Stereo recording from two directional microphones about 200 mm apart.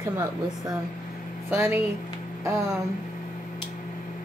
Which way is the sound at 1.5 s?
10° right (ahead or behind).